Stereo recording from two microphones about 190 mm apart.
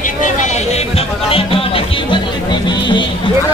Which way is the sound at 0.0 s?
40° left (ahead or behind).